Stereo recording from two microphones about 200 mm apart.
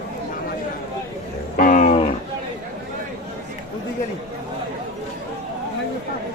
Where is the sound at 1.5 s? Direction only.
40° left (ahead or behind).